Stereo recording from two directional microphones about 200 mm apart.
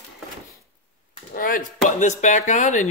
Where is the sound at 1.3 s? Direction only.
45° left (ahead or behind).